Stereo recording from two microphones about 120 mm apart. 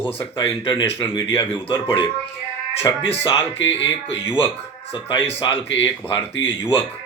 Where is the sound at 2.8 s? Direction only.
20° left (ahead or behind).